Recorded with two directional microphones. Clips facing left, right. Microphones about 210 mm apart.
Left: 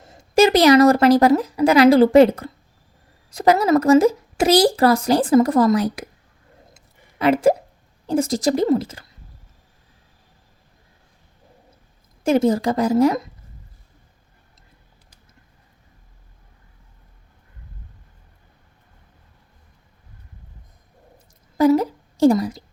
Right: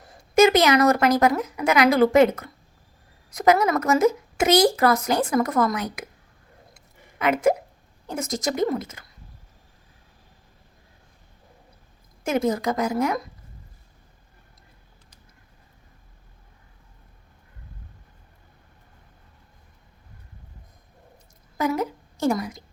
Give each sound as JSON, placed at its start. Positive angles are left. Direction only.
{"t": 0.0, "sound": "a woman's voice", "side_deg": 30}
{"t": 6.7, "sound": "a sound", "side_deg": 30}
{"t": 8.0, "sound": "speech", "side_deg": 30}
{"t": 12.2, "sound": "speech", "side_deg": 30}
{"t": 21.6, "sound": "a woman's voice", "side_deg": 35}